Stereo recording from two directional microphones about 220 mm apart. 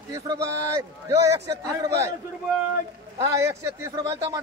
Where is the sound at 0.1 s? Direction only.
15° right (ahead or behind).